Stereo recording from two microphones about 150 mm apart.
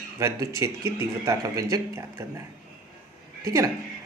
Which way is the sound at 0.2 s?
20° right (ahead or behind).